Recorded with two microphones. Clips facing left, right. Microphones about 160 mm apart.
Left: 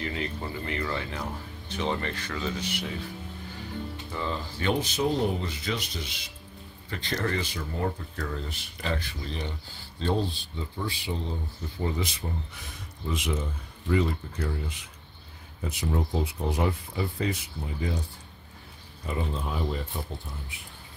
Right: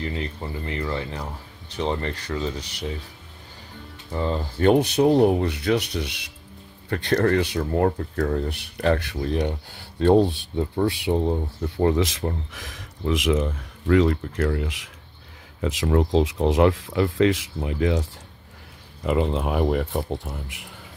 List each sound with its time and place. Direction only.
0.0 s speech: 25° right (ahead or behind)
4.1 s speech: 40° right (ahead or behind); by 18.0 s 90° right
19.0 s speech: 80° right